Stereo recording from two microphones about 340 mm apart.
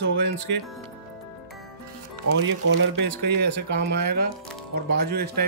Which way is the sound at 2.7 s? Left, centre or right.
Right.